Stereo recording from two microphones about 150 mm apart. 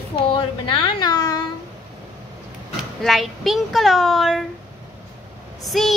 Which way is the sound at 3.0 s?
Centre (ahead or behind).